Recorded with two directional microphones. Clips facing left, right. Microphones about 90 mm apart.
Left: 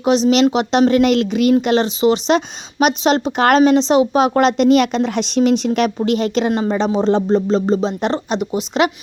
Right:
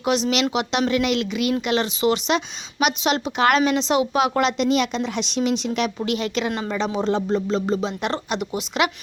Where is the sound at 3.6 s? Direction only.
30° left (ahead or behind).